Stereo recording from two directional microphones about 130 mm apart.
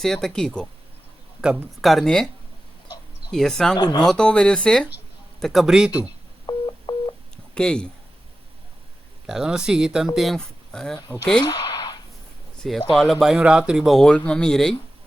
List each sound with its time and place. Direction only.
0.0 s speech: 5° left (ahead or behind)
1.4 s speech: 5° right (ahead or behind)
3.3 s speech: 5° left (ahead or behind)
3.8 s speech: 30° left (ahead or behind)
4.0 s speech: 5° left (ahead or behind)
6.0 s telephone dialing: 35° left (ahead or behind)
7.5 s speech: 5° left (ahead or behind)
9.2 s speech: 5° right (ahead or behind)
11.4 s a sound: 35° left (ahead or behind)
12.6 s speech: centre (ahead or behind)